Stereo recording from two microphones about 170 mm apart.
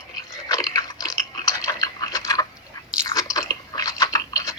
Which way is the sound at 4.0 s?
25° left (ahead or behind).